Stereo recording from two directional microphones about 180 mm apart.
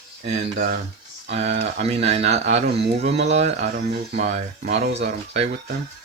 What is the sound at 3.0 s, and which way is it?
Speech, 35° right (ahead or behind).